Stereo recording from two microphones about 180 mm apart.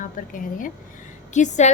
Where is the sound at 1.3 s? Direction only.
40° left (ahead or behind).